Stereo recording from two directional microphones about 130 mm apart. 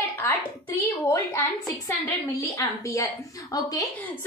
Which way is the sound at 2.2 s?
25° left (ahead or behind).